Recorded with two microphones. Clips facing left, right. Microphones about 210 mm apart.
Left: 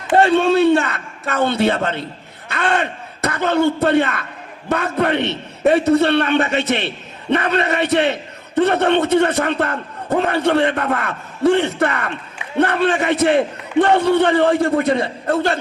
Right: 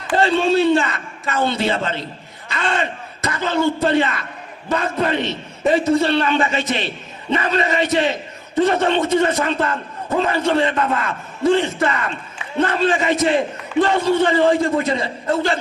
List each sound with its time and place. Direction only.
0.2 s a man's voice: 65° left (ahead or behind)